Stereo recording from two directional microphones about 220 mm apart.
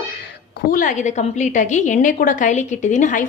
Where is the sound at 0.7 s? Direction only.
35° left (ahead or behind).